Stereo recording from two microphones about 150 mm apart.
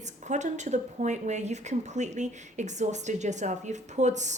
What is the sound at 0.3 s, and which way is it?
Speech, 50° right (ahead or behind).